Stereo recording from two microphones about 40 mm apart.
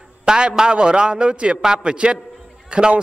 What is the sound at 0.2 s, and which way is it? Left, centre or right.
A man's voice, right.